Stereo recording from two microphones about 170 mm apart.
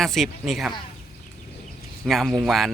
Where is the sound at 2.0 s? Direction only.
Centre (ahead or behind).